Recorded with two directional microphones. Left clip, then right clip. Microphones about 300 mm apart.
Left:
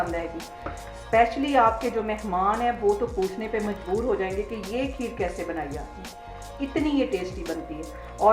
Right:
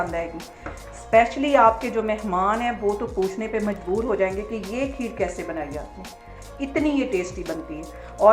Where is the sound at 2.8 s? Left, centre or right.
Centre.